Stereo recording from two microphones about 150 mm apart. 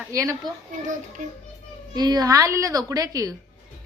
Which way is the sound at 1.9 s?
25° right (ahead or behind).